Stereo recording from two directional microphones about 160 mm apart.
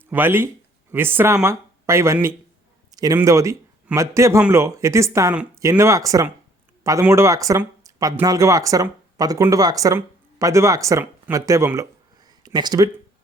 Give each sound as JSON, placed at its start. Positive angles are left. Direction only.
{"t": 0.1, "sound": "speech", "side_deg": -15}
{"t": 2.9, "sound": "a sound", "side_deg": -25}
{"t": 3.2, "sound": "speech", "side_deg": -20}